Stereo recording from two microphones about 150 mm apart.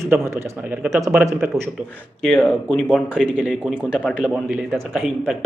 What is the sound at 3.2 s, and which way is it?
Speech, 10° right (ahead or behind).